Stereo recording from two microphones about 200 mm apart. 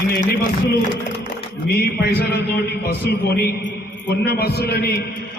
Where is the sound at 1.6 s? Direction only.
50° left (ahead or behind).